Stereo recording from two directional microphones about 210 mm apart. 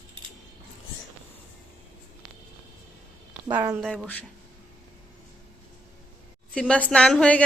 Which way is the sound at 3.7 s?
Centre (ahead or behind).